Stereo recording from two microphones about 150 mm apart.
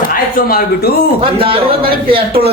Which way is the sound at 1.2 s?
40° right (ahead or behind).